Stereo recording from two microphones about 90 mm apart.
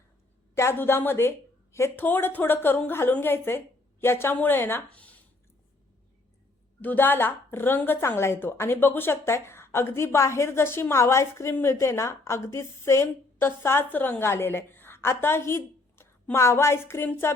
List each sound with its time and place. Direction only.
0.5 s a woman's voice: 30° left (ahead or behind)
6.8 s a woman's voice: 20° left (ahead or behind)